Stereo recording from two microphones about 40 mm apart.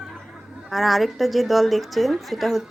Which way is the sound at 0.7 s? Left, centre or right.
Centre.